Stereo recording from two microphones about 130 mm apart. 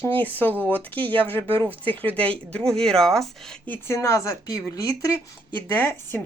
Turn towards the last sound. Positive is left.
turn(degrees=15)  # may be behind; listen again after turning